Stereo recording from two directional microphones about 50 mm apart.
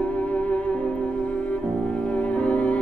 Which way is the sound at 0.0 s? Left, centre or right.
Left.